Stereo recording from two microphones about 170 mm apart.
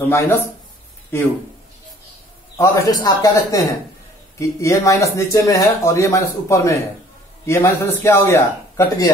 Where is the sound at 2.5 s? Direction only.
15° left (ahead or behind).